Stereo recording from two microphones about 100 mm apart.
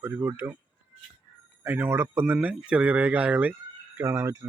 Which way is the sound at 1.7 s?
20° right (ahead or behind).